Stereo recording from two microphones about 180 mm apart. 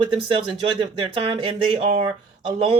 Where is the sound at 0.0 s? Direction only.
30° right (ahead or behind).